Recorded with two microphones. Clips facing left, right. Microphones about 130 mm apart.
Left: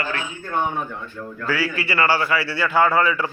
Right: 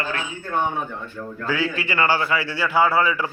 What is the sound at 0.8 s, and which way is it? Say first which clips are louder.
A man's voice: even; 15° right (ahead or behind).